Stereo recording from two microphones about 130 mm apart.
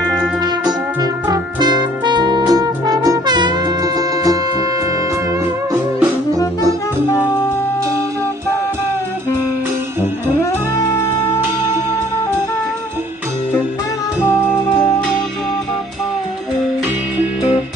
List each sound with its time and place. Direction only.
1.3 s music: 35° right (ahead or behind)